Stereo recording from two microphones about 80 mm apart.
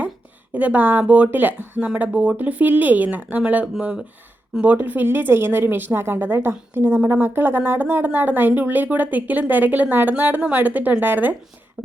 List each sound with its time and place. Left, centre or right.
0.5 s a woman's voice: centre